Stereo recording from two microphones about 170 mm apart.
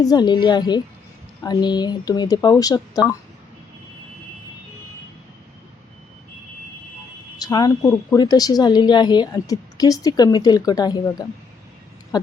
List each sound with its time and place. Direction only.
0.0 s a woman's voice: 25° left (ahead or behind)
7.3 s a woman's voice: 20° left (ahead or behind)
12.1 s a sound: 25° left (ahead or behind)